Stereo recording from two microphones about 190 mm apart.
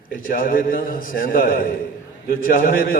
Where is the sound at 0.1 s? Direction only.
50° left (ahead or behind).